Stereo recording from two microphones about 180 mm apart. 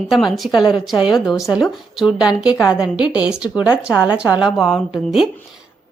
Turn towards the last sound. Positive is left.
turn(degrees=0)  # may be behind; listen again after turning